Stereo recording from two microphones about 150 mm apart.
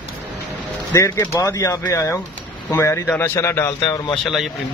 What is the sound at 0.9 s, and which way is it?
Speech, 20° left (ahead or behind).